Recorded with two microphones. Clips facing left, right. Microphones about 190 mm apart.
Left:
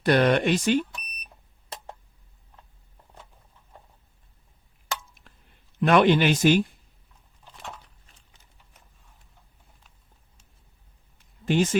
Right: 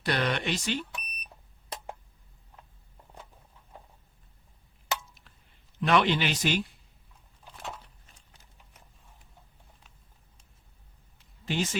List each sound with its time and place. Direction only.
0.0 s speech: 50° left (ahead or behind)
5.8 s speech: 50° left (ahead or behind)
7.4 s a sound: 5° right (ahead or behind)
11.4 s speech: 50° left (ahead or behind)